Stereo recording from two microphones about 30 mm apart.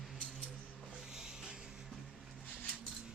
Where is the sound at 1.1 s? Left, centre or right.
Centre.